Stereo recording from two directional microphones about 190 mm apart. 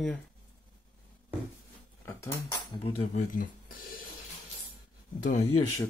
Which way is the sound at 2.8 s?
30° left (ahead or behind).